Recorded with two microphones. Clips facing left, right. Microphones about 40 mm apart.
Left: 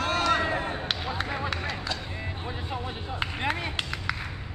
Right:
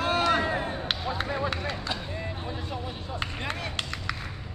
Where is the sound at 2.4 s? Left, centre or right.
Centre.